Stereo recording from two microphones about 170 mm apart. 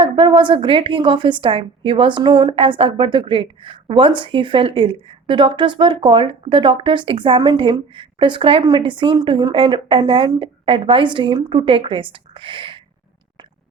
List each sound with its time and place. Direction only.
0.0 s a woman's voice: 30° right (ahead or behind)